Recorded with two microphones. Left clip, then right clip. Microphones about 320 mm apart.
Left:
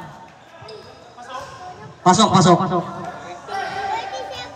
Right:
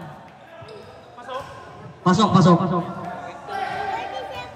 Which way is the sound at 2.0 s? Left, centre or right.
Left.